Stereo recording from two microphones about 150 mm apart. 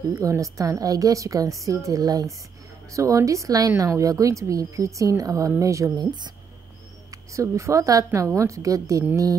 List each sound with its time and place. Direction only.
0.1 s a woman's voice: 20° right (ahead or behind)